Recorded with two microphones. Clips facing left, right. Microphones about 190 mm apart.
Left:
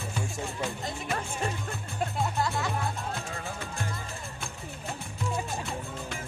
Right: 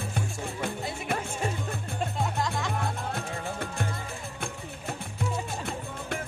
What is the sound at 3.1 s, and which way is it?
Music, 55° right (ahead or behind).